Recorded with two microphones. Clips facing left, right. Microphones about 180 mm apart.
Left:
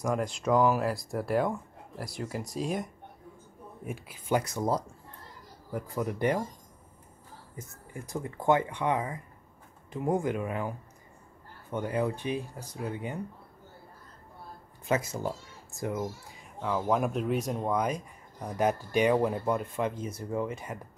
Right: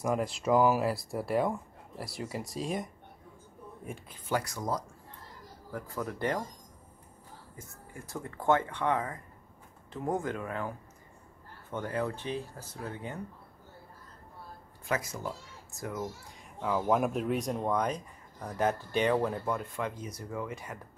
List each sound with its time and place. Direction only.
0.0 s speech: 5° right (ahead or behind)
4.3 s speech: 20° left (ahead or behind)
7.5 s speech: 20° left (ahead or behind)
11.7 s speech: 15° left (ahead or behind)
14.9 s speech: 25° left (ahead or behind)
16.0 s speech: 5° left (ahead or behind); by 20.8 s 20° left (ahead or behind)